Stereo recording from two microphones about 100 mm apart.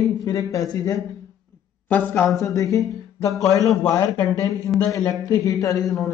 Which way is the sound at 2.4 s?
35° left (ahead or behind).